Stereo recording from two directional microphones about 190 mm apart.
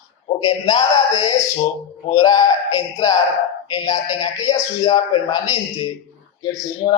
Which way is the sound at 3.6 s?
20° left (ahead or behind).